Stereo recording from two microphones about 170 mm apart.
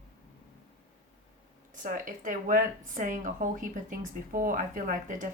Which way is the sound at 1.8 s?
50° right (ahead or behind).